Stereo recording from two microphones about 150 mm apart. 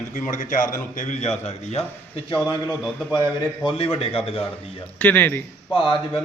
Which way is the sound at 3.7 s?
40° left (ahead or behind).